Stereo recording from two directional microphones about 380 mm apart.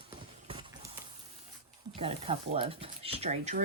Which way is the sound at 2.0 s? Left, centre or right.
Centre.